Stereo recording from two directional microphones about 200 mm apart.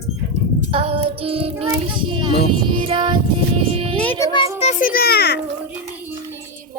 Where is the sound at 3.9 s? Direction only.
10° left (ahead or behind).